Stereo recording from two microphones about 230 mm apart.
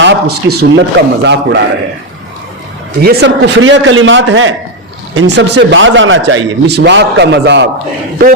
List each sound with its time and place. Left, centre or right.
0.0 s a man's voice: right
3.0 s a man's voice: right